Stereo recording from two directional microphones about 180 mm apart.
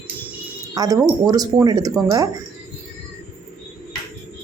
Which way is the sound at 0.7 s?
20° right (ahead or behind).